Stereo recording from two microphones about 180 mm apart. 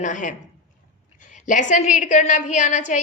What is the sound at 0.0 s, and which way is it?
A woman's voice, 45° left (ahead or behind).